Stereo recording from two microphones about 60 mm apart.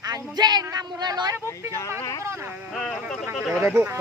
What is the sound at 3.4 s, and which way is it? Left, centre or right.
Speech, centre.